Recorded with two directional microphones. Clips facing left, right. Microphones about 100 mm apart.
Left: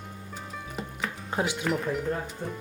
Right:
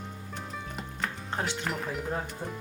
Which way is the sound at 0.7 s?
5° left (ahead or behind).